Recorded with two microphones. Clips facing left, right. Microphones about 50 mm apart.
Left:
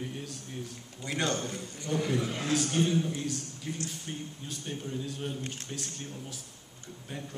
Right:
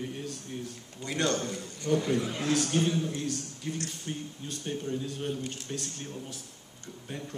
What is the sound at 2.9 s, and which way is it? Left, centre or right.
A man's voice, centre.